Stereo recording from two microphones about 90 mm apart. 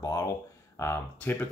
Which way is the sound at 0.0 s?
40° left (ahead or behind).